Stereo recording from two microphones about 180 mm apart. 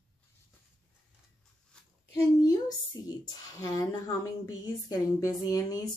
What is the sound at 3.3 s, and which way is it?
A woman's voice, 20° left (ahead or behind).